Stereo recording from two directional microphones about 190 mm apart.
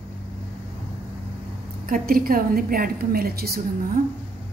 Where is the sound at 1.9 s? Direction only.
50° right (ahead or behind).